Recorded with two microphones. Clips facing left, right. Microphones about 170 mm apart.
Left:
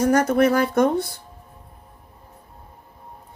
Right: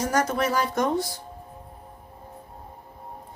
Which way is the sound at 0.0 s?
55° left (ahead or behind).